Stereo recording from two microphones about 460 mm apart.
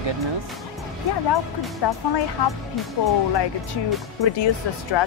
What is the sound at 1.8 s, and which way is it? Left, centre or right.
Speech, left.